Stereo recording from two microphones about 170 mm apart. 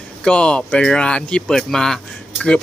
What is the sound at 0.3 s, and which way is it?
Speech, 5° left (ahead or behind).